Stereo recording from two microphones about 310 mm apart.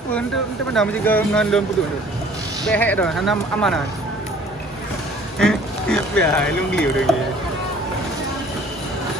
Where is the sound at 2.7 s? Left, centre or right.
Centre.